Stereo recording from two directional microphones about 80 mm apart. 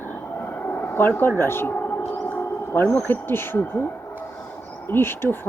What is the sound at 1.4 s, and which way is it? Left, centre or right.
Whale vocalization, left.